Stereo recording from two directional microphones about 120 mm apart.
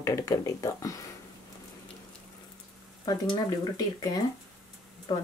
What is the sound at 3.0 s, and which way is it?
Speech, 35° left (ahead or behind).